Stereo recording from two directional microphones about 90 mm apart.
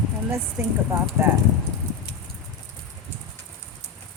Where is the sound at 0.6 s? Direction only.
25° right (ahead or behind).